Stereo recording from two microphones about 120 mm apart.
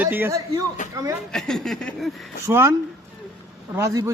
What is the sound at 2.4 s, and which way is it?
Speech, 25° right (ahead or behind).